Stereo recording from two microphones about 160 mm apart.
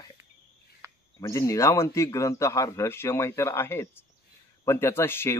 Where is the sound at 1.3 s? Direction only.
20° left (ahead or behind).